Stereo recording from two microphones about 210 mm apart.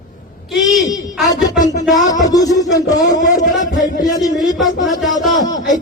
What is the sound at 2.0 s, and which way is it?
A man's voice, 15° left (ahead or behind).